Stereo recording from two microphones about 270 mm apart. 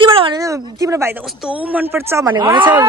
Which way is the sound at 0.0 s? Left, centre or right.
Centre.